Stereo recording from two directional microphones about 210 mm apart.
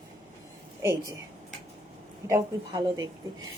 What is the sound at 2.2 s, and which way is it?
Speech, 15° right (ahead or behind).